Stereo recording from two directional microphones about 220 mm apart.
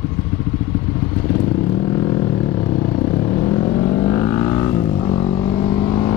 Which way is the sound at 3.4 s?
20° left (ahead or behind).